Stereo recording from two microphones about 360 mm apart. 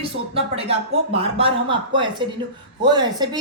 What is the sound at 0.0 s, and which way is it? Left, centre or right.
A woman's voice, centre.